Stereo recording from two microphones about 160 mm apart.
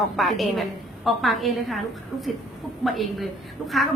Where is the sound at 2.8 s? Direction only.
Centre (ahead or behind).